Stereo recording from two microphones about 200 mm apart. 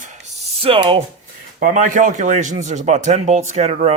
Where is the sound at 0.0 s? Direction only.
35° right (ahead or behind).